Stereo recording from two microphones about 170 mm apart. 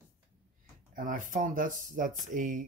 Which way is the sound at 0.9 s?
50° right (ahead or behind).